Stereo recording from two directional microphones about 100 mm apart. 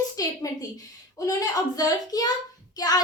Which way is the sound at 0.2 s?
35° left (ahead or behind).